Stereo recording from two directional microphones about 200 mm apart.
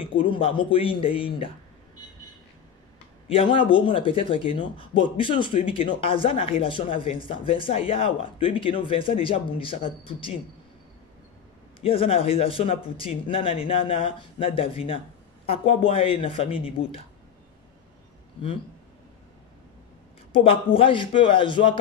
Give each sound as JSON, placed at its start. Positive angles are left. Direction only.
{"t": 0.2, "sound": "speech", "side_deg": 25}
{"t": 3.3, "sound": "speech", "side_deg": 25}
{"t": 11.8, "sound": "speech", "side_deg": 30}
{"t": 18.4, "sound": "speech", "side_deg": 25}
{"t": 20.4, "sound": "speech", "side_deg": 25}